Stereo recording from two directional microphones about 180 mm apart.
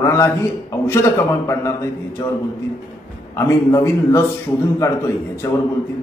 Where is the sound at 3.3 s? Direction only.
15° left (ahead or behind).